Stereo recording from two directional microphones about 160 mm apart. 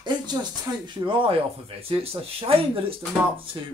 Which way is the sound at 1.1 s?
35° right (ahead or behind).